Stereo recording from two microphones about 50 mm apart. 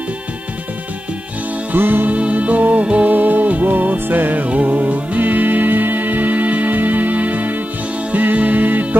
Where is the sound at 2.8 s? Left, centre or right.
Right.